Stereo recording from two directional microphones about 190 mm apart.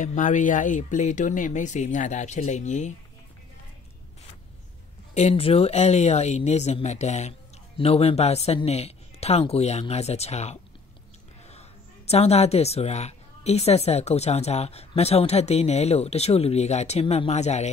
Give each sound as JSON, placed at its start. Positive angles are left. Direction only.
{"t": 0.0, "sound": "a woman's voice", "side_deg": 40}
{"t": 5.1, "sound": "a woman's voice", "side_deg": 35}
{"t": 12.1, "sound": "a woman's voice", "side_deg": 35}